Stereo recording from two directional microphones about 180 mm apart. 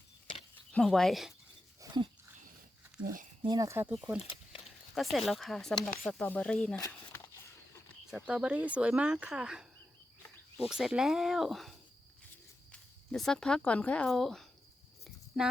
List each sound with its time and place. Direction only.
0.7 s speech: 5° left (ahead or behind)
1.8 s dog: 20° right (ahead or behind)
3.4 s speech: 20° right (ahead or behind)
5.1 s speech: centre (ahead or behind)
8.1 s speech: 5° right (ahead or behind)
10.7 s speech: 5° right (ahead or behind)
12.7 s speech: 5° left (ahead or behind)